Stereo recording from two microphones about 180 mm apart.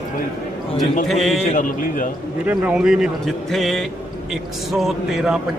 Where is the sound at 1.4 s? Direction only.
45° left (ahead or behind).